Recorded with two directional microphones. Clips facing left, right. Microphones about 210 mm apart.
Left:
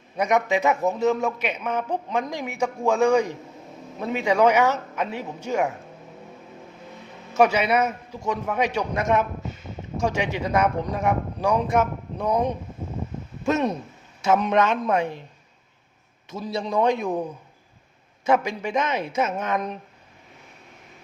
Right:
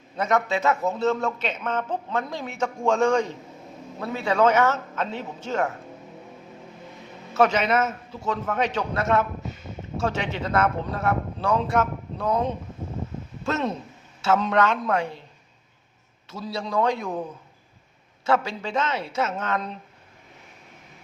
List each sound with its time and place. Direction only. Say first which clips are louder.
0.2 s a man's voice: left 2 dB; 15° left (ahead or behind)
7.3 s a man's voice: left 1 dB; 10° left (ahead or behind)
16.3 s a man's voice: left 2 dB; 20° left (ahead or behind)
18.3 s a man's voice: left 2 dB; 15° left (ahead or behind)